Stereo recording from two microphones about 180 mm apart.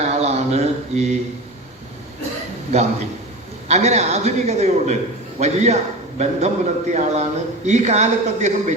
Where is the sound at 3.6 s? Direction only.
40° right (ahead or behind).